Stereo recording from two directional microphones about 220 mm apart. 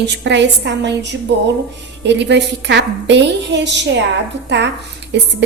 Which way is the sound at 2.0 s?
50° right (ahead or behind).